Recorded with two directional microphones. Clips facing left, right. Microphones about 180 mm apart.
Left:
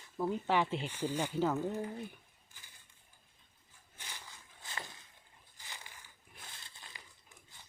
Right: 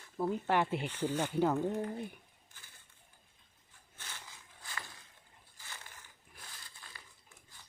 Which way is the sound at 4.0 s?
15° left (ahead or behind).